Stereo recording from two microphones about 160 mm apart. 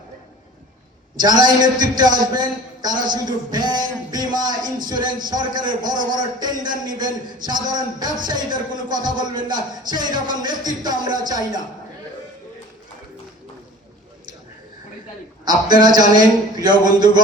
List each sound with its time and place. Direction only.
1.2 s a man's voice: 25° right (ahead or behind)
15.4 s a man's voice: 25° right (ahead or behind)